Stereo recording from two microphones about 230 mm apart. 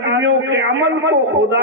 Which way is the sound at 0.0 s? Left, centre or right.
Right.